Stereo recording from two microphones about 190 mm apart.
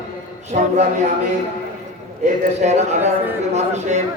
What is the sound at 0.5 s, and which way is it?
Speech, 40° right (ahead or behind).